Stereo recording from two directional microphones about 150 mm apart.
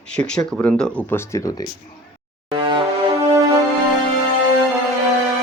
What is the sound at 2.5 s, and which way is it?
Music, 35° right (ahead or behind).